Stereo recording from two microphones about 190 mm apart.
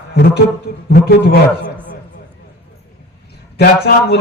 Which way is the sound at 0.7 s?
55° left (ahead or behind).